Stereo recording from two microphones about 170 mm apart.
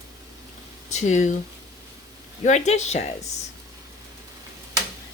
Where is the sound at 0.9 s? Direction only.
45° left (ahead or behind).